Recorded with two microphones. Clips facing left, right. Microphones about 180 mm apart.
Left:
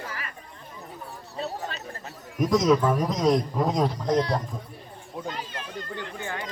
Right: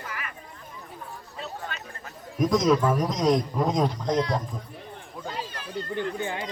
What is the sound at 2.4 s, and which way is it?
A man's voice, centre (ahead or behind).